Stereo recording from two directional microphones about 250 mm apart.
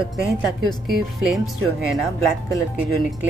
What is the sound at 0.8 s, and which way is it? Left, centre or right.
Speech, centre.